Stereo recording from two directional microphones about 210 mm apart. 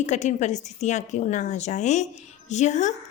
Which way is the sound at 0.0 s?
35° left (ahead or behind).